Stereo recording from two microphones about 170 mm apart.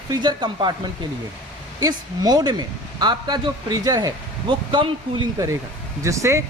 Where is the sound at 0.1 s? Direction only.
25° right (ahead or behind).